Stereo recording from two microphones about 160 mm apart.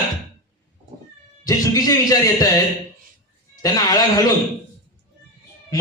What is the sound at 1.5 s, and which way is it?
A man's voice, 20° left (ahead or behind).